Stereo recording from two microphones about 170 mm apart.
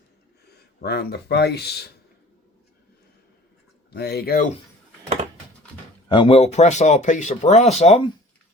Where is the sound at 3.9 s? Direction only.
70° left (ahead or behind).